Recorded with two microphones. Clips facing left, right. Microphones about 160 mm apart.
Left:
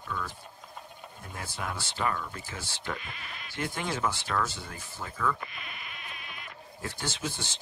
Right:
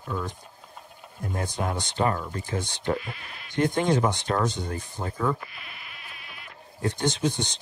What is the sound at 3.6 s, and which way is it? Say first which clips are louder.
Speech: right 9 dB; 40° right (ahead or behind).